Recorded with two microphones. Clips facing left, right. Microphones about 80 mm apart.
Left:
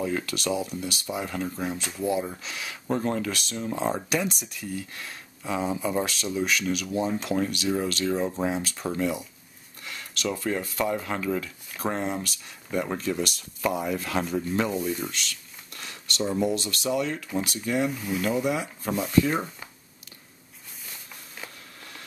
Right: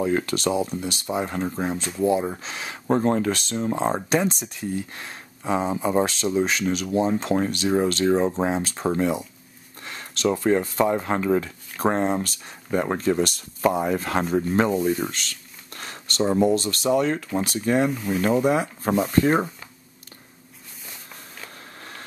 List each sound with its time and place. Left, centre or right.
0.0 s speech: right
15.7 s speech: right